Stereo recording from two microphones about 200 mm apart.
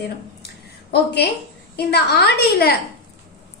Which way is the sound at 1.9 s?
55° left (ahead or behind).